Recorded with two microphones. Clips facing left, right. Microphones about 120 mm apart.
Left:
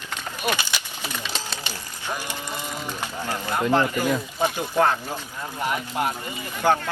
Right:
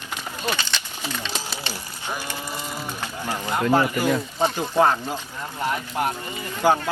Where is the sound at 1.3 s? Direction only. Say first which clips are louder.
Right 1 dB; 15° right (ahead or behind).